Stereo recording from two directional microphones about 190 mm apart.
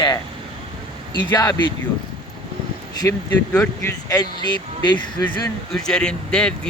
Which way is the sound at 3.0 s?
15° left (ahead or behind).